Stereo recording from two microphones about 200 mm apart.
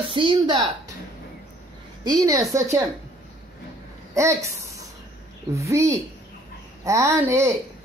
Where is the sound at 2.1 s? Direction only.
15° right (ahead or behind).